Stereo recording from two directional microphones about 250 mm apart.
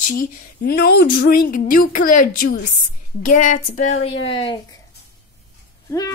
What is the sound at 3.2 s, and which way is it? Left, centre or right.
A woman's voice, left.